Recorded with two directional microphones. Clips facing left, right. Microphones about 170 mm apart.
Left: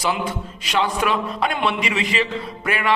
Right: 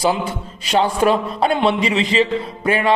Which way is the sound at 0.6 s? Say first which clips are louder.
Right 5 dB; 35° right (ahead or behind).